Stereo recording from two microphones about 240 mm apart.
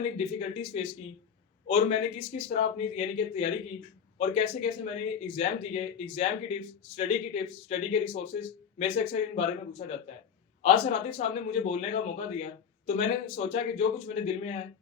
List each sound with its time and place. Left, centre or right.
0.2 s speech: left